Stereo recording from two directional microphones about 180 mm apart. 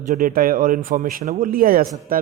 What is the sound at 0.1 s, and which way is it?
Speech, 50° right (ahead or behind).